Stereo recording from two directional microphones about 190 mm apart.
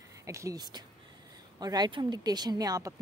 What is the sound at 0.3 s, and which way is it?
Speech, 15° right (ahead or behind).